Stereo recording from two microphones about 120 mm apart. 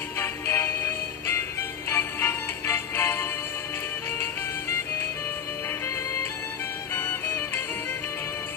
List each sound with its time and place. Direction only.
0.2 s music: 20° left (ahead or behind)
6.9 s music: 15° left (ahead or behind)